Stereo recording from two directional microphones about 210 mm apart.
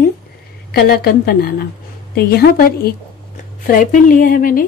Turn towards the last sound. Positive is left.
turn(degrees=45)  # may be behind; listen again after turning